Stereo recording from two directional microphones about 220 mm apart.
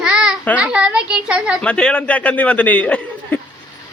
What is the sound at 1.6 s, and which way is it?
A man's voice, 5° left (ahead or behind).